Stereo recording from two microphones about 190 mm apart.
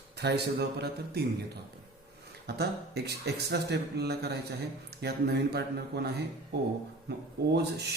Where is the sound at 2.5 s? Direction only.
60° right (ahead or behind).